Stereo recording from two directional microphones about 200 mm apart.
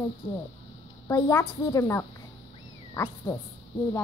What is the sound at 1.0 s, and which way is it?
A child's voice, 15° left (ahead or behind).